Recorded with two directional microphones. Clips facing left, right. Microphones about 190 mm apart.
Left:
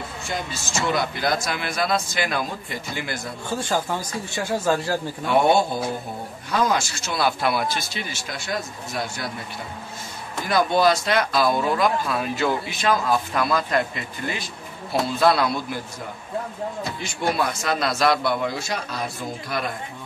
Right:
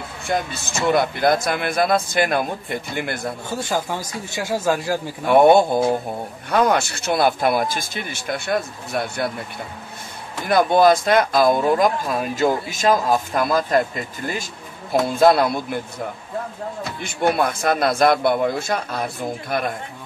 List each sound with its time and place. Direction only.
0.3 s speech: 60° right (ahead or behind)
4.4 s speech: 10° right (ahead or behind)
5.2 s speech: 55° right (ahead or behind)
10.4 s speech: 55° right (ahead or behind)
17.0 s speech: 55° right (ahead or behind)